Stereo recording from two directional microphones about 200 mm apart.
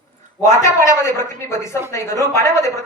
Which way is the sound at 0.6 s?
15° left (ahead or behind).